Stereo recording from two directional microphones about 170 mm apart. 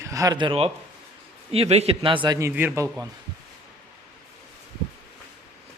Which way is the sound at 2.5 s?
10° right (ahead or behind).